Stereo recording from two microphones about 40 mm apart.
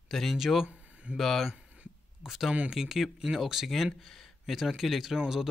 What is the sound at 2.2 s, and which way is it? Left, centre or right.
Speech, centre.